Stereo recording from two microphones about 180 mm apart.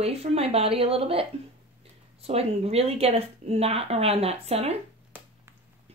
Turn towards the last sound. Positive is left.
turn(degrees=-10)  # may be behind; listen again after turning